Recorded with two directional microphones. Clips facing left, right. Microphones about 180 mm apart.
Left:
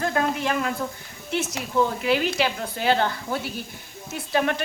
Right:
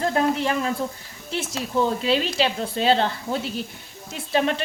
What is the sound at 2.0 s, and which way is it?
Speech, 25° right (ahead or behind).